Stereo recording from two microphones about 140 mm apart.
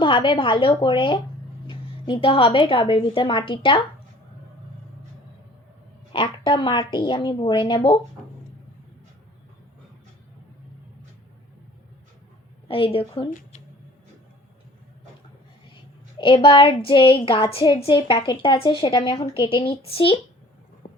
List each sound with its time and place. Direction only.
0.0 s a woman's voice: 35° left (ahead or behind)
6.1 s a woman's voice: 35° left (ahead or behind)
12.6 s a woman's voice: 40° left (ahead or behind)
16.1 s a woman's voice: 35° left (ahead or behind)
20.8 s a sound: 65° left (ahead or behind)